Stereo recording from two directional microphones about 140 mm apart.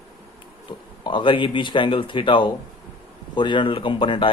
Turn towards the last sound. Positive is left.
turn(degrees=40)  # may be behind; listen again after turning